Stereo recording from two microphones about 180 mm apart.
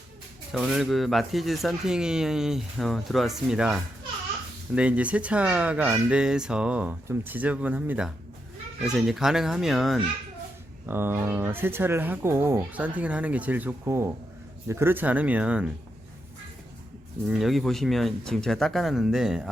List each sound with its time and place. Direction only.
0.5 s speech: centre (ahead or behind)
10.8 s speech: 10° right (ahead or behind)
17.2 s speech: centre (ahead or behind)